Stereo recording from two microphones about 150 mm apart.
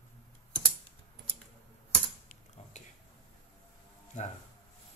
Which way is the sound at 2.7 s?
50° left (ahead or behind).